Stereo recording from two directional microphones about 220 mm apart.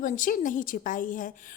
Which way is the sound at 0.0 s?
35° left (ahead or behind).